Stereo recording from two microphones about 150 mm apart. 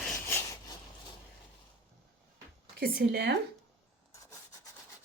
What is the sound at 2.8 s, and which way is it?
Speech, 90° right.